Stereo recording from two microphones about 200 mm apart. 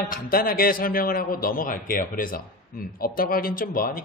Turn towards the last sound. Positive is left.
turn(degrees=45)  # may be behind; listen again after turning